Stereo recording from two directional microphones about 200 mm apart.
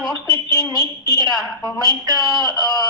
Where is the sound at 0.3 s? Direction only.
20° right (ahead or behind).